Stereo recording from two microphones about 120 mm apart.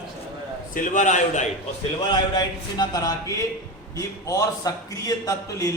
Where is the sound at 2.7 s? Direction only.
35° left (ahead or behind).